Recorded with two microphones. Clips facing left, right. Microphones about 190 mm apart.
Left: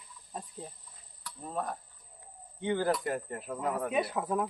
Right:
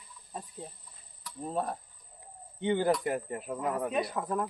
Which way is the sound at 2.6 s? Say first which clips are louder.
Right 2 dB; 20° right (ahead or behind).